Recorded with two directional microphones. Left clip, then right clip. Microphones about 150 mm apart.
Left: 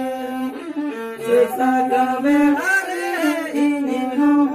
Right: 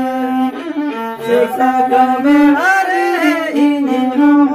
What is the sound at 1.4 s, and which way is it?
Music, 15° left (ahead or behind).